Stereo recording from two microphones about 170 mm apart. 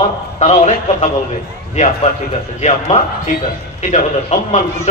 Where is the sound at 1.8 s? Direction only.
45° left (ahead or behind).